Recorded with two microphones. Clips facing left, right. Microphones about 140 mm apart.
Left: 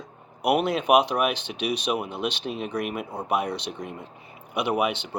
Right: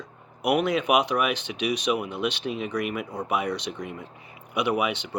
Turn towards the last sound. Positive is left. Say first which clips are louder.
# left 1 dB
turn(degrees=25)  # may be behind; listen again after turning